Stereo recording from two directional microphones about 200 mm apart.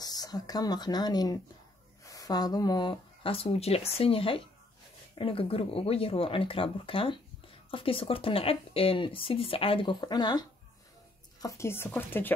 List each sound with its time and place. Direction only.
0.0 s speech: 20° left (ahead or behind)
11.4 s speech: 15° left (ahead or behind)